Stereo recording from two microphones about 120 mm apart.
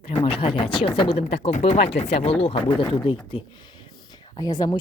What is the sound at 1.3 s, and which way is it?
Speech, 70° left (ahead or behind).